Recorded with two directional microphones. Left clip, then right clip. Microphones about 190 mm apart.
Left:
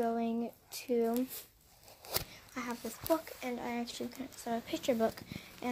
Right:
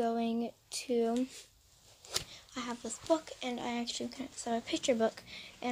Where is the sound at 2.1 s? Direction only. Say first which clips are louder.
Right 1 dB; 25° left (ahead or behind).